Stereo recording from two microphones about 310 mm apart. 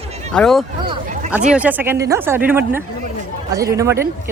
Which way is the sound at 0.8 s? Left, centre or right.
Centre.